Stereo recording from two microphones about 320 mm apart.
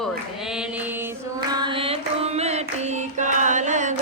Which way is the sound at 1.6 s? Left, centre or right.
Centre.